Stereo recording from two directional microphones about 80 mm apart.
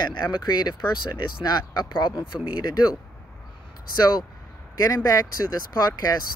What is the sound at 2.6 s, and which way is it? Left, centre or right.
Speech, left.